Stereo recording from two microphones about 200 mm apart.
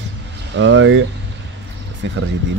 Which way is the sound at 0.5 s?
65° right (ahead or behind).